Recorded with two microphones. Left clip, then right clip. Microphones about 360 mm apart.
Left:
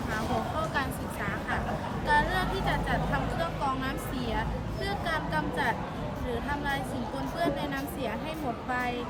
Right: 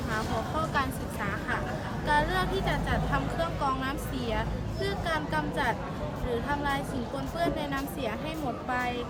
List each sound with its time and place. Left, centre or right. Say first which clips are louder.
0.7 s vehicle: right 1 dB; centre